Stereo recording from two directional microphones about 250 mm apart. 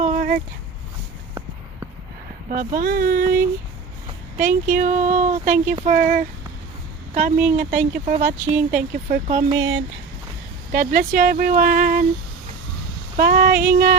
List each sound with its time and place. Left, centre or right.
0.0 s a sound: right
2.6 s speech: right
10.7 s speech: right
13.1 s speech: right